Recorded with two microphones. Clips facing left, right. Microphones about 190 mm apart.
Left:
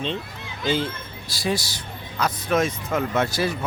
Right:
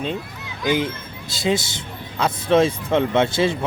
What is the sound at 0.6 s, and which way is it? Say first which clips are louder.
Speech: right 3 dB; 15° right (ahead or behind).